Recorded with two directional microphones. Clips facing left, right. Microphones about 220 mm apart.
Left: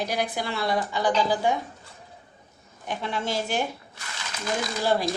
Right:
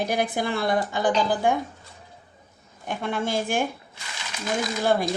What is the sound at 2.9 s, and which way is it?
Speech, 50° right (ahead or behind).